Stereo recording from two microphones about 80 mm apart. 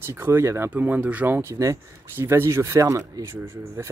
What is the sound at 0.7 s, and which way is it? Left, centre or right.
Speech, right.